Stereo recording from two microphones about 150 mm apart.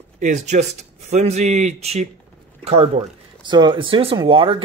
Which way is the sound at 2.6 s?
40° right (ahead or behind).